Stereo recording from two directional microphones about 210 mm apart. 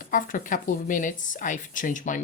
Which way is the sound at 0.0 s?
40° left (ahead or behind).